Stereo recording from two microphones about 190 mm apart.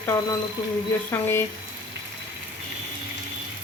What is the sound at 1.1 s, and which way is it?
Speech, 10° left (ahead or behind).